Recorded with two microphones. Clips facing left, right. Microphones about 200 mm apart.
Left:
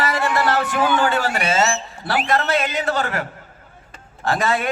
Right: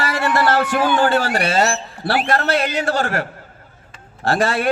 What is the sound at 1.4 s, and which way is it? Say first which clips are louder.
Speech: right 1 dB; 65° right (ahead or behind).